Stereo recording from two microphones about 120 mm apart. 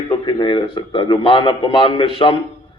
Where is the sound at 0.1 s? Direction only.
40° left (ahead or behind).